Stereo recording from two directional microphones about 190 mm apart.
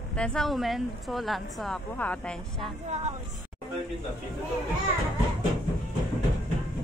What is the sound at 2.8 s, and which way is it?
Speech, 35° right (ahead or behind).